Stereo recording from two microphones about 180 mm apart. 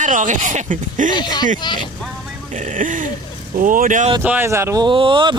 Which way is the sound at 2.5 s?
45° right (ahead or behind).